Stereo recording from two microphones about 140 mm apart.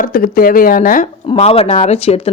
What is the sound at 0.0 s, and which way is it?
Speech, 85° left.